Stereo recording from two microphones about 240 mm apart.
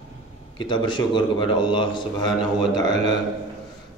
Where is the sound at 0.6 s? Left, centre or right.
Centre.